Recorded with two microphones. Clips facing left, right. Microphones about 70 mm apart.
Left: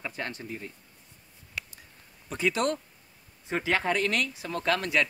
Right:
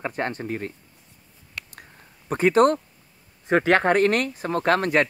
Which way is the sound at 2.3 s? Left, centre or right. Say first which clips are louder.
Right 10 dB; right.